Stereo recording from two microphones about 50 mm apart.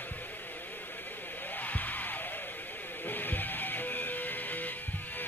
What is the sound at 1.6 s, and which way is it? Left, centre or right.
Music, left.